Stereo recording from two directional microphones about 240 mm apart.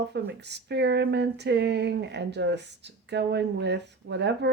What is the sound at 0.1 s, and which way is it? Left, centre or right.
Speech, right.